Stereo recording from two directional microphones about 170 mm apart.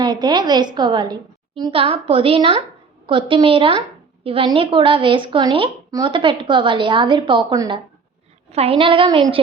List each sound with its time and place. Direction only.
0.0 s a woman's voice: 25° right (ahead or behind)